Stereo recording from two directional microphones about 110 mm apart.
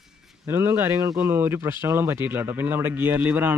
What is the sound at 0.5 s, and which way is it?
Speech, 20° right (ahead or behind).